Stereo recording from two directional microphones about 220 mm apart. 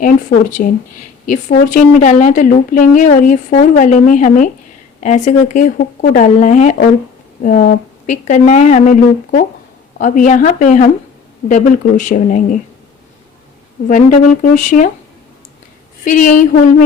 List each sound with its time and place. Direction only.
0.0 s a woman's voice: 35° left (ahead or behind)
8.0 s a woman's voice: 35° left (ahead or behind)
13.8 s a woman's voice: 35° left (ahead or behind)
16.0 s a woman's voice: 35° left (ahead or behind)